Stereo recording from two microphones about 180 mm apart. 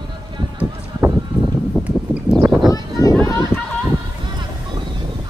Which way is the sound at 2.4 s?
15° right (ahead or behind).